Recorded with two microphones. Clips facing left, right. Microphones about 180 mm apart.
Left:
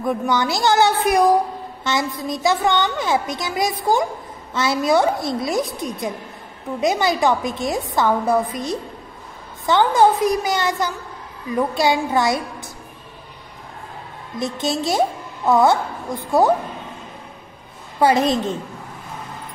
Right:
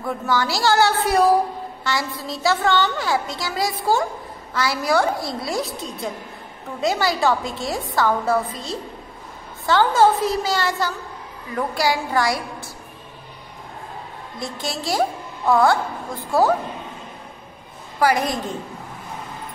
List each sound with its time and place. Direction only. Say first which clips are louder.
0.0 s a woman's voice: left 3 dB; 20° left (ahead or behind)
14.4 s a woman's voice: left 6 dB; 20° left (ahead or behind)
17.9 s a woman's voice: left 3 dB; 25° left (ahead or behind)